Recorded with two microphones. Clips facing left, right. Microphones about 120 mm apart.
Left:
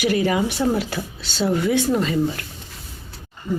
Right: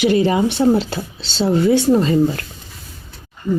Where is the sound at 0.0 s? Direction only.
25° right (ahead or behind).